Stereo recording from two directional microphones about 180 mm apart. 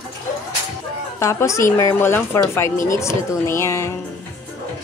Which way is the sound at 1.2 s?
15° left (ahead or behind).